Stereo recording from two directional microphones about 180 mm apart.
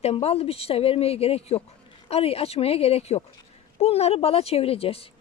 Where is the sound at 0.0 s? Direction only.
35° left (ahead or behind).